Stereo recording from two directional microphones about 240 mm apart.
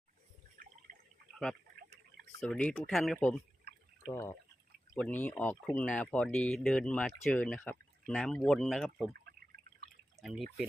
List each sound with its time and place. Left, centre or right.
0.9 s water: right
2.4 s speech: centre
10.2 s speech: centre